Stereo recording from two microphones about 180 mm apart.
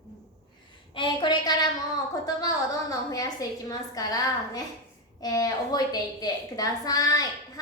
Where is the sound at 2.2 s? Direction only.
20° left (ahead or behind).